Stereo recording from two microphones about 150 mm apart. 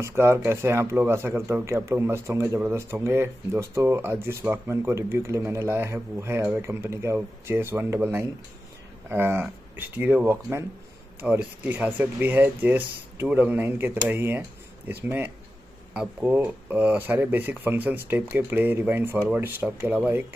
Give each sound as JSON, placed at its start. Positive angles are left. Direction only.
{"t": 0.0, "sound": "speech", "side_deg": -15}